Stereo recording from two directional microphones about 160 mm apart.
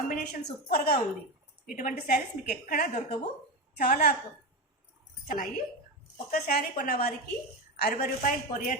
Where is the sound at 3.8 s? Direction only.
60° left (ahead or behind).